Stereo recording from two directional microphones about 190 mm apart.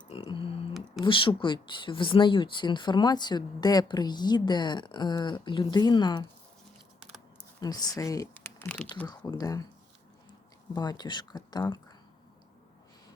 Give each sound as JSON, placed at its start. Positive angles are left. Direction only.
{"t": 0.1, "sound": "a sound", "side_deg": 25}
{"t": 1.0, "sound": "speech", "side_deg": 25}
{"t": 7.3, "sound": "speech", "side_deg": 20}
{"t": 9.0, "sound": "speech", "side_deg": 20}
{"t": 10.8, "sound": "speech", "side_deg": 20}